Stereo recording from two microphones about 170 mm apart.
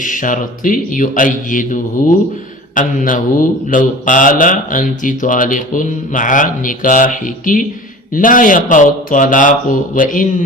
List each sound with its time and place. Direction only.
0.0 s mantra: 50° left (ahead or behind)